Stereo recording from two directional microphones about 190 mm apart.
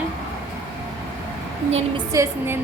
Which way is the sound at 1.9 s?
15° right (ahead or behind).